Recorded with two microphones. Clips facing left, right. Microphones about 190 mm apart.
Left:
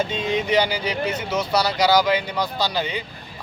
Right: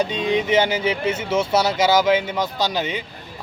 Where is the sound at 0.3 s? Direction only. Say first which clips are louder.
Right 2 dB; 20° right (ahead or behind).